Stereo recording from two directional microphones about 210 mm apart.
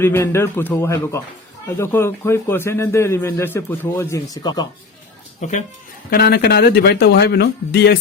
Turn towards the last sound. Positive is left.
turn(degrees=50)  # may be behind; listen again after turning